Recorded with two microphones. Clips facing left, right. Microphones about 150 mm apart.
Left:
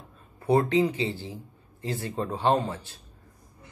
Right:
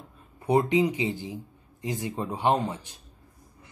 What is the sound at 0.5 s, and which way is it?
Speech, 15° right (ahead or behind).